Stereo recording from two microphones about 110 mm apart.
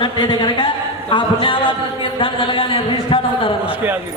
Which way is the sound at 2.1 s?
50° left (ahead or behind).